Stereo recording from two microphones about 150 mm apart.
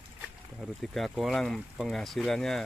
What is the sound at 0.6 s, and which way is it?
Speech, centre (ahead or behind).